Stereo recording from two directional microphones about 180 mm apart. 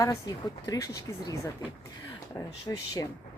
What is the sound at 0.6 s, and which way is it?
Speech, 20° left (ahead or behind).